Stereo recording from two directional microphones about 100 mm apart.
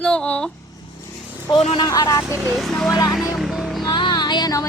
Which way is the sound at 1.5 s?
90° left.